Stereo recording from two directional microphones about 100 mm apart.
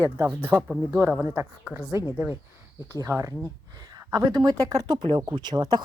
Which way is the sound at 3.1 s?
30° right (ahead or behind).